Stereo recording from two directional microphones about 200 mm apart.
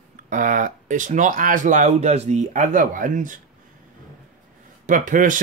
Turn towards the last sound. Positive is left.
turn(degrees=-40)  # may be behind; listen again after turning